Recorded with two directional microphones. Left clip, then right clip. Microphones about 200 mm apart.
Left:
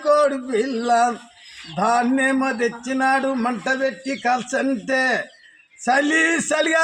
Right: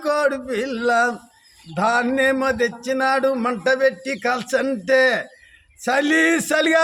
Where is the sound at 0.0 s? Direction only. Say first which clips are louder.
Left 4 dB; 40° right (ahead or behind).